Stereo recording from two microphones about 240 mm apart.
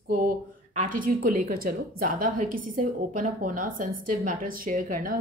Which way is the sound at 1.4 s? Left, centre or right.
Right.